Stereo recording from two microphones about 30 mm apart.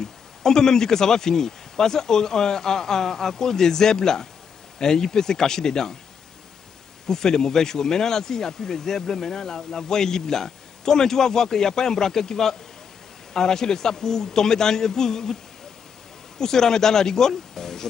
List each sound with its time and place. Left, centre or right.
0.0 s speech: centre
7.1 s speech: centre
16.3 s speech: centre